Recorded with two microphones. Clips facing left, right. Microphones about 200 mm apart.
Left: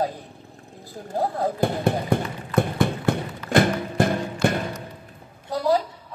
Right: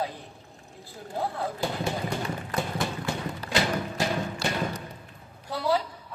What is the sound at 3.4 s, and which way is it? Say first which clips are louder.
Music: left 8 dB; 55° left (ahead or behind).